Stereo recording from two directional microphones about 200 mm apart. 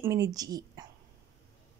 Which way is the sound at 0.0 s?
15° right (ahead or behind).